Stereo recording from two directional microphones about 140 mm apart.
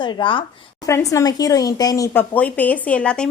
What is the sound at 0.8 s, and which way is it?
Speech, 20° left (ahead or behind).